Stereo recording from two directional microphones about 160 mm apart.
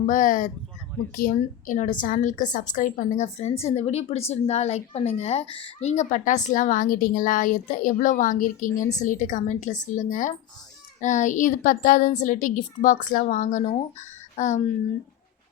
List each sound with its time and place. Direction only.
0.0 s a woman's voice: 55° left (ahead or behind)
8.8 s a woman's voice: 20° left (ahead or behind)
9.0 s speech: 50° left (ahead or behind)